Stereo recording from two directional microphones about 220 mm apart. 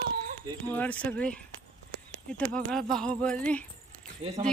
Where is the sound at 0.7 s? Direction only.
5° left (ahead or behind).